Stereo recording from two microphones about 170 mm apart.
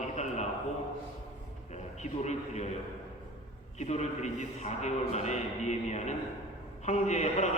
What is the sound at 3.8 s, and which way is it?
A man's voice, 40° left (ahead or behind).